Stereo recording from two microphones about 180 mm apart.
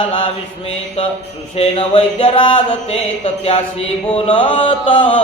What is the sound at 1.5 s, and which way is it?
Speech, 35° left (ahead or behind).